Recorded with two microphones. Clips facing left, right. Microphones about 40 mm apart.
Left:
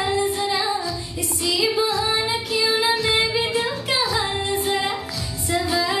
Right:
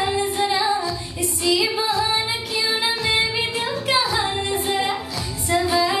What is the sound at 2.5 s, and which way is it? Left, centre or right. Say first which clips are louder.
Music: left 4 dB; centre.